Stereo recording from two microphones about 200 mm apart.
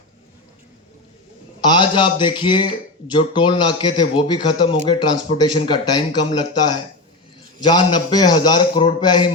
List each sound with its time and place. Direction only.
1.6 s a man's voice: 25° left (ahead or behind)